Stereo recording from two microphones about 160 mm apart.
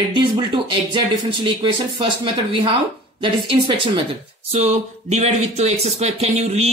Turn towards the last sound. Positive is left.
turn(degrees=-40)  # may be behind; listen again after turning